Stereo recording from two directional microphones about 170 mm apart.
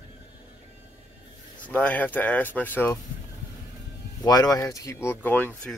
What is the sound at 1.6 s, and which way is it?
Speech, 10° left (ahead or behind).